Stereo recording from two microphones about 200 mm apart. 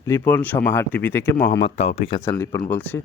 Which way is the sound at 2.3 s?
15° left (ahead or behind).